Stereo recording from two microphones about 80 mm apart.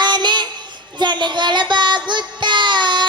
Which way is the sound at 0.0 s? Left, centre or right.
Right.